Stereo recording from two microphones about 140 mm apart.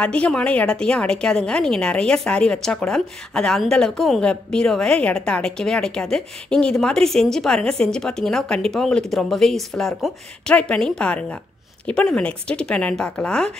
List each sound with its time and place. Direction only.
0.0 s a woman's voice: 10° left (ahead or behind)